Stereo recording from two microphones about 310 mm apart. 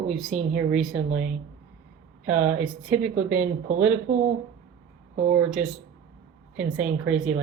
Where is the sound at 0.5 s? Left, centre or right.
Centre.